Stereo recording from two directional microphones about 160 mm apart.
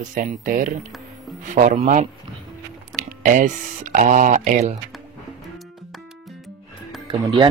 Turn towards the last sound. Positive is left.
turn(degrees=-30)  # may be behind; listen again after turning